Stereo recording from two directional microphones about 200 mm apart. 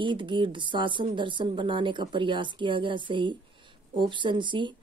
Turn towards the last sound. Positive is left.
turn(degrees=-25)  # may be behind; listen again after turning